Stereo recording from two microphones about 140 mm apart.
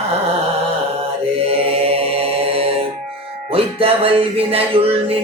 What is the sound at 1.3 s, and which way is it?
Music, 45° right (ahead or behind).